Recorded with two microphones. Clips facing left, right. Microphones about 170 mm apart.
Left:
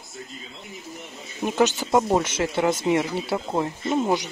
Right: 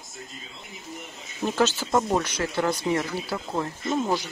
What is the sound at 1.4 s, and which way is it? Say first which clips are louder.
Speech: left 3 dB; 15° left (ahead or behind).